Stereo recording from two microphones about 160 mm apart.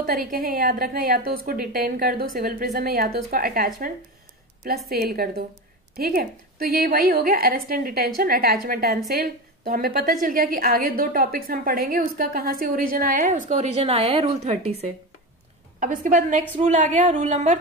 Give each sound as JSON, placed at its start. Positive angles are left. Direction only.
{"t": 0.0, "sound": "a woman's voice", "side_deg": -65}
{"t": 4.8, "sound": "a woman's voice", "side_deg": -75}
{"t": 15.8, "sound": "a woman's voice", "side_deg": -55}